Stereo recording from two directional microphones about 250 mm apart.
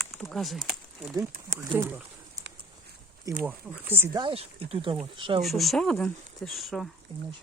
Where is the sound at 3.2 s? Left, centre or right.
Centre.